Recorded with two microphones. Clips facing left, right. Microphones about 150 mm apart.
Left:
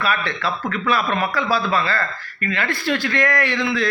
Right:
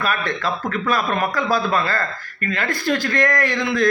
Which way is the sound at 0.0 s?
45° right (ahead or behind).